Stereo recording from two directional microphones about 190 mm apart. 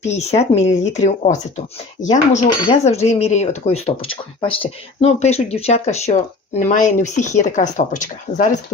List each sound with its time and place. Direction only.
0.0 s speech: 35° left (ahead or behind)